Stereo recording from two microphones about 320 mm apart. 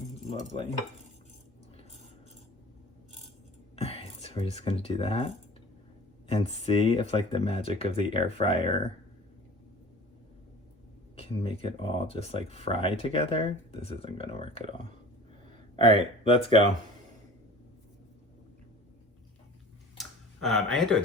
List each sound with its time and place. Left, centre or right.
0.3 s speech: centre
3.8 s speech: centre
11.2 s speech: centre
20.0 s a sound: centre